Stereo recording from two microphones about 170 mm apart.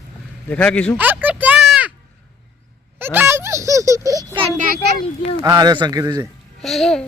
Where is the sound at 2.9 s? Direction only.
10° right (ahead or behind).